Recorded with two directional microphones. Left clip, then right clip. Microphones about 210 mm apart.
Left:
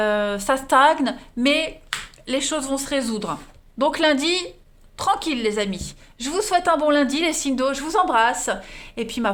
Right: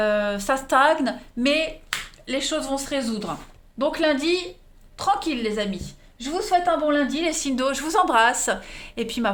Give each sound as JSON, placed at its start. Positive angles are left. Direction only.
{"t": 0.0, "sound": "a woman's voice", "side_deg": 25}
{"t": 7.3, "sound": "a woman's voice", "side_deg": 20}